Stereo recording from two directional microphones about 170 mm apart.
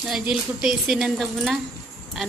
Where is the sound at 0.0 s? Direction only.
5° right (ahead or behind).